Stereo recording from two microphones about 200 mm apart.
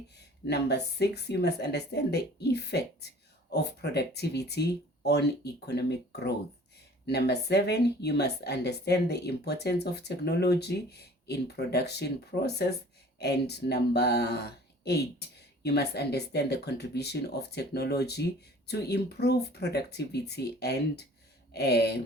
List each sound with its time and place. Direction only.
0.4 s speech: 55° left (ahead or behind)